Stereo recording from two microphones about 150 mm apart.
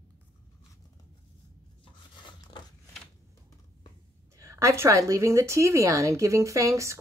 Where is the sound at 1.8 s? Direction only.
30° left (ahead or behind).